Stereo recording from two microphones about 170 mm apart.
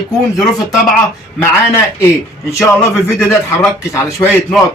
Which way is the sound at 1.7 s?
15° left (ahead or behind).